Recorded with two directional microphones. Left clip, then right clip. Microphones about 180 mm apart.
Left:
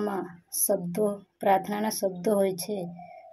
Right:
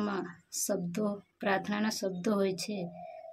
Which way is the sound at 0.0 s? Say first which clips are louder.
Left 5 dB; 20° right (ahead or behind).